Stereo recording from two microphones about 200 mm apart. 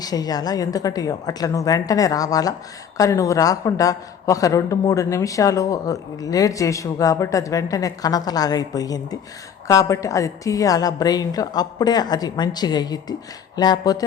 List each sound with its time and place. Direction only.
0.0 s a woman's voice: 20° left (ahead or behind)